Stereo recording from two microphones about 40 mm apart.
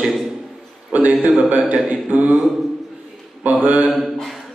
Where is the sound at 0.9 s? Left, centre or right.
Right.